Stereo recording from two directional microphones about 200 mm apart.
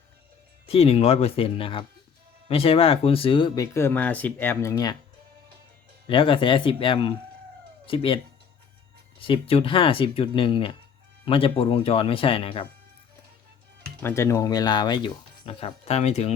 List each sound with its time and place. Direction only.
0.7 s speech: 30° left (ahead or behind)
6.1 s speech: 25° left (ahead or behind)
9.2 s speech: 25° left (ahead or behind)
14.0 s speech: 15° left (ahead or behind); by 16.3 s 35° left (ahead or behind)